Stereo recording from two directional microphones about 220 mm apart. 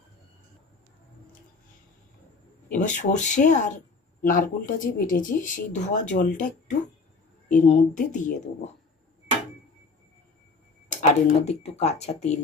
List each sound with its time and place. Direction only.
2.7 s speech: 35° left (ahead or behind)
10.9 s speech: 35° left (ahead or behind)